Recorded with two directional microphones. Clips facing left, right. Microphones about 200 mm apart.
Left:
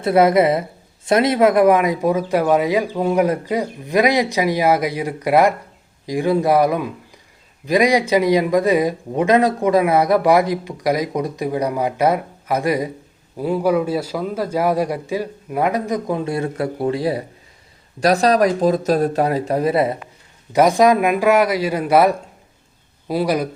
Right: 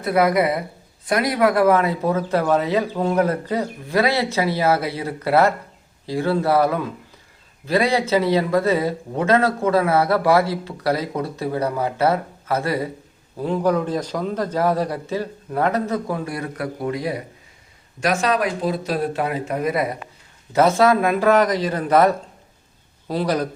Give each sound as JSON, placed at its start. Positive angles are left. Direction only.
{"t": 0.0, "sound": "a woman's voice", "side_deg": 25}
{"t": 20.5, "sound": "speech", "side_deg": 15}